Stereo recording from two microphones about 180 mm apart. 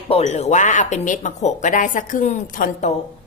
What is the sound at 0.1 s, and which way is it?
Speech, 35° left (ahead or behind).